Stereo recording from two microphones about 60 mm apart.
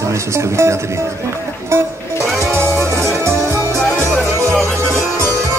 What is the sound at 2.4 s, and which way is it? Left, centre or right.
Music, right.